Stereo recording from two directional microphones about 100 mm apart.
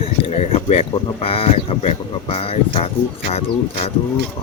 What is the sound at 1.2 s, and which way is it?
Speech, 75° left (ahead or behind).